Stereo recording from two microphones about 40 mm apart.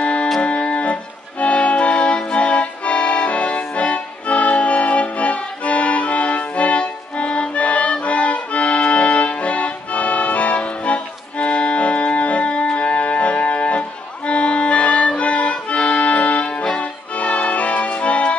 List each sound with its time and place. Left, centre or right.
0.0 s music: left
0.4 s organ: left
1.4 s accordion: left
15.7 s music: left